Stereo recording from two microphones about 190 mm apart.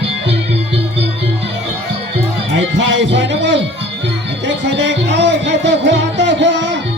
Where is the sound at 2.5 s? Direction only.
70° right (ahead or behind).